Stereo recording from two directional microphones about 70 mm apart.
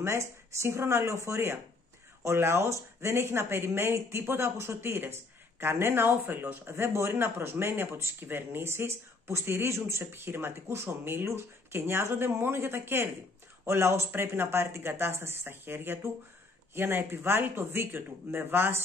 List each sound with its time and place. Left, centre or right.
0.0 s speech: right
6.7 s speech: right